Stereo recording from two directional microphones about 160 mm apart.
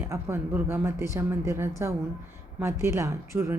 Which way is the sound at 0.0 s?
15° right (ahead or behind).